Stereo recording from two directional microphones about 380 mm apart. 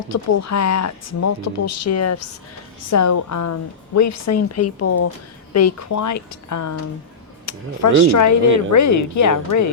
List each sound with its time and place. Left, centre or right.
0.1 s speech: left